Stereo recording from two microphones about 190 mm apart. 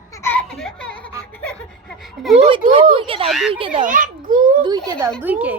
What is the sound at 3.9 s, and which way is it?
Speech, 45° right (ahead or behind).